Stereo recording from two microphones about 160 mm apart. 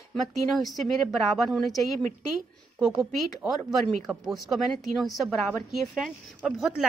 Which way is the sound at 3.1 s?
Centre (ahead or behind).